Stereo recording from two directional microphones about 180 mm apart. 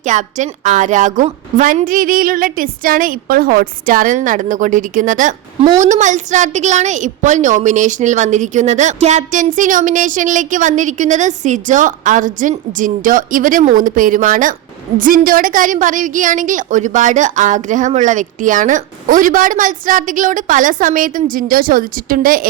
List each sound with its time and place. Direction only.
0.0 s a woman's voice: 40° right (ahead or behind)